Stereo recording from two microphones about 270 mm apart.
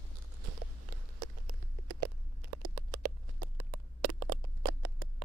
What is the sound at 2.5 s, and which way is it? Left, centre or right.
Patter, right.